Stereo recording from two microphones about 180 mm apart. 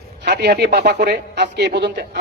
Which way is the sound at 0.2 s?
70° right (ahead or behind).